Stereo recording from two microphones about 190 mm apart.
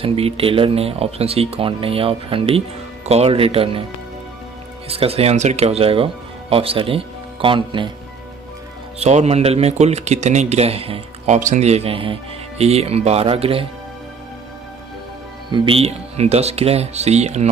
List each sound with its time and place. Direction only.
0.0 s speech: 30° right (ahead or behind)
4.8 s speech: 30° right (ahead or behind)
9.0 s speech: 35° right (ahead or behind)
15.5 s speech: 30° right (ahead or behind)